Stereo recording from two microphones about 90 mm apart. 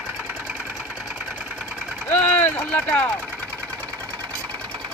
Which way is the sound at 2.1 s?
20° left (ahead or behind).